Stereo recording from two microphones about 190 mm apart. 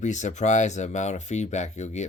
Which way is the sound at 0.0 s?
40° left (ahead or behind).